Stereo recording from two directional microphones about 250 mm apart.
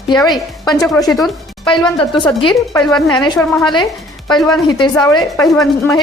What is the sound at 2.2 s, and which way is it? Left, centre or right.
A woman's voice, centre.